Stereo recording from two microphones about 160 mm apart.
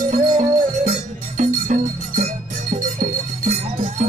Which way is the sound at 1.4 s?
50° right (ahead or behind).